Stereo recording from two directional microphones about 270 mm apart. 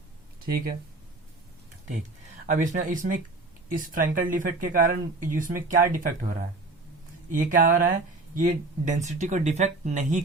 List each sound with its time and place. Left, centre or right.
2.5 s speech: right